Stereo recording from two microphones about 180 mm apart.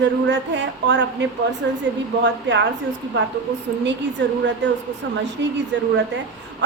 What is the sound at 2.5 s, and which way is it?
Speech, 75° right (ahead or behind).